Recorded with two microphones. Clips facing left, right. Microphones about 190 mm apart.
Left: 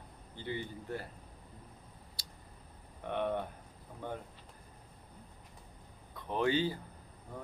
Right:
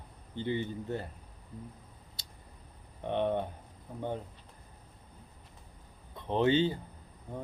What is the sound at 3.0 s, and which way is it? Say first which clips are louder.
Speech: right 4 dB; 20° right (ahead or behind).